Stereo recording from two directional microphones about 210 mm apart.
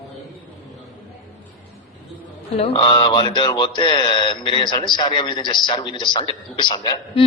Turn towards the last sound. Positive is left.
turn(degrees=20)  # may be behind; listen again after turning